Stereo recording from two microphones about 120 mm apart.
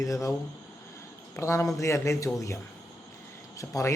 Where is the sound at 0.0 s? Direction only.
25° left (ahead or behind).